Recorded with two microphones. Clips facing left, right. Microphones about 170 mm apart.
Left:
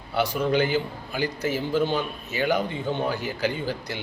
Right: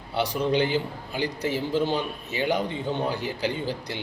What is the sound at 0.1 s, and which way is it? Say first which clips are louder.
A man's voice: left 1 dB; 30° right (ahead or behind).